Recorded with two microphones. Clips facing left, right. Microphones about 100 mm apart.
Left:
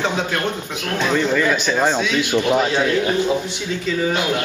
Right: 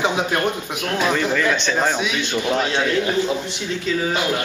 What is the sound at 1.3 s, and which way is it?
A man's voice, 5° left (ahead or behind).